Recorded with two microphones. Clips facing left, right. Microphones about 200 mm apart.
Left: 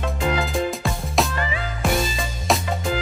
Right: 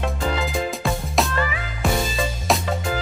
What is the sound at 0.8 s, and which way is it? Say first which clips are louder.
Music: right 1 dB; centre (ahead or behind).